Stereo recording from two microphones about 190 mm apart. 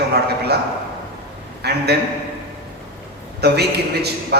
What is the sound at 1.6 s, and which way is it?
Speech, 60° right (ahead or behind).